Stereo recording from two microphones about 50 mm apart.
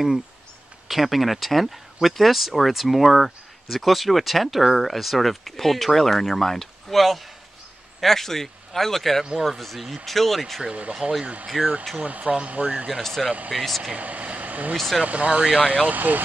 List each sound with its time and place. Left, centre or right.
0.8 s speech: centre
10.6 s speech: right
11.0 s speech: centre
11.5 s speech: centre
12.0 s speech: right
13.0 s speech: centre
13.9 s speech: right